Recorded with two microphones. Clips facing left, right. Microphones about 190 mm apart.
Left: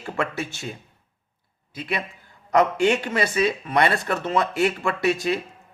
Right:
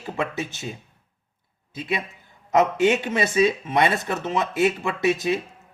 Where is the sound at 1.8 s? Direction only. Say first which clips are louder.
Right 1 dB; 20° right (ahead or behind).